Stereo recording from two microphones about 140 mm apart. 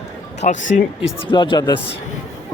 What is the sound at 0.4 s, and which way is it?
Speech, 60° left (ahead or behind).